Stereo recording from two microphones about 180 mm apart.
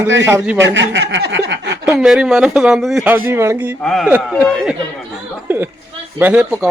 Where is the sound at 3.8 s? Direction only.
Centre (ahead or behind).